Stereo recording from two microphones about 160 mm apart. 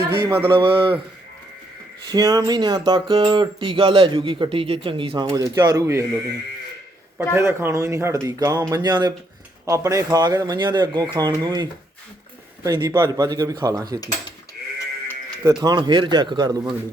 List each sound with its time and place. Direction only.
0.1 s speech: 30° right (ahead or behind)
2.0 s speech: 25° right (ahead or behind)
7.3 s speech: 15° right (ahead or behind)
15.4 s speech: 25° right (ahead or behind)